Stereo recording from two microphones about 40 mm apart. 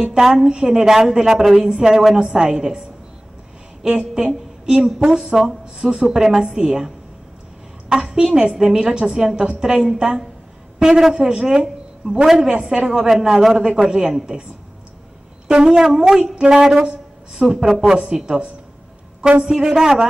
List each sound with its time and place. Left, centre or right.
0.0 s a woman's voice: centre
3.8 s a woman's voice: right
7.9 s a woman's voice: centre
15.4 s wind instrument: centre
15.8 s a woman's voice: centre
19.4 s a woman's voice: centre